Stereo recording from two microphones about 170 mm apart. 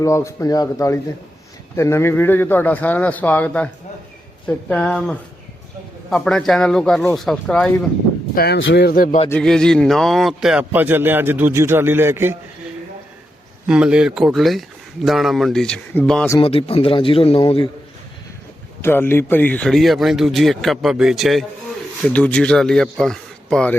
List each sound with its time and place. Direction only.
0.0 s a man's voice: 15° left (ahead or behind)
8.4 s speech: 70° left (ahead or behind)
9.3 s a man's voice: 5° left (ahead or behind); by 12.4 s 15° right (ahead or behind)
13.7 s speech: 5° right (ahead or behind)
16.4 s speech: 35° left (ahead or behind)
18.8 s speech: 15° left (ahead or behind)